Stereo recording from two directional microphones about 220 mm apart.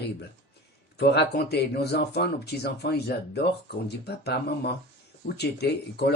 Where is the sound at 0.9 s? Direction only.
50° left (ahead or behind).